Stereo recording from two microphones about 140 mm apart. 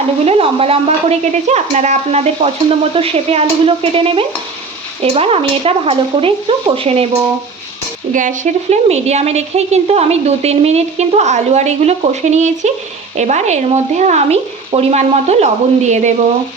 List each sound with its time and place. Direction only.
0.3 s a woman's voice: 45° right (ahead or behind)
8.1 s a woman's voice: 65° right (ahead or behind)